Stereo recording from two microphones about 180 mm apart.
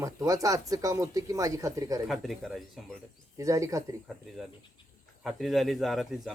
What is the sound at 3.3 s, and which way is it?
Speech, 15° right (ahead or behind).